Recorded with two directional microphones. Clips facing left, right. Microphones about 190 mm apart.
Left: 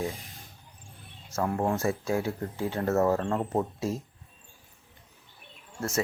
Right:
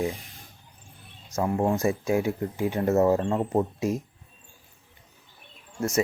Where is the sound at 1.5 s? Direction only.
10° right (ahead or behind).